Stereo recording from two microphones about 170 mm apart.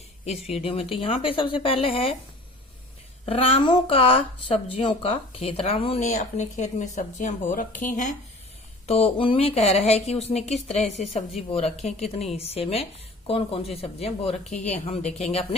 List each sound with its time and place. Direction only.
0.3 s speech: 35° left (ahead or behind)
3.2 s speech: 35° left (ahead or behind)
8.9 s speech: 35° left (ahead or behind)